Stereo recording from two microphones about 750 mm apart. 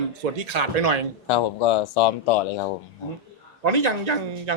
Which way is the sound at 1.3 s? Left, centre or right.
Left.